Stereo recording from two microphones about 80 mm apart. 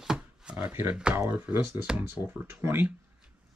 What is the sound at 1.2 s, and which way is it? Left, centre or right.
Speech, centre.